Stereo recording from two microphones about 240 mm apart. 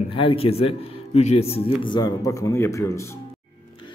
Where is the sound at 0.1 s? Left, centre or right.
Left.